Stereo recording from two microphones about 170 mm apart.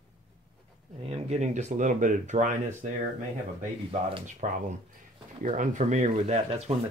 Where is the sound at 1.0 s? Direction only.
40° right (ahead or behind).